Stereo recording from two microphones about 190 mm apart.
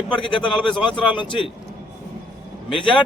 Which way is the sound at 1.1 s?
25° left (ahead or behind).